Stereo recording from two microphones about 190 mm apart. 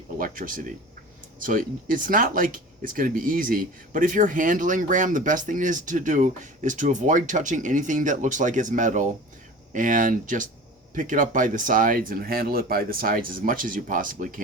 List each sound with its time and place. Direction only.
0.2 s speech: 45° right (ahead or behind)